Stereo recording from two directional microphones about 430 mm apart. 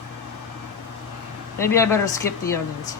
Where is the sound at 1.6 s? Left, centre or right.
Centre.